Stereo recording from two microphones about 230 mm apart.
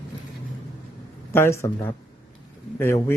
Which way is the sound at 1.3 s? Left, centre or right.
Centre.